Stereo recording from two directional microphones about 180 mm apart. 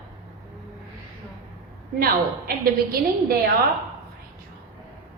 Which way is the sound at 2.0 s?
55° right (ahead or behind).